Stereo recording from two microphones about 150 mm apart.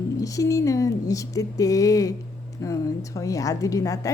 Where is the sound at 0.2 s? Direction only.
25° left (ahead or behind).